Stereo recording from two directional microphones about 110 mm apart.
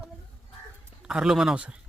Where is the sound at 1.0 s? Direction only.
5° right (ahead or behind).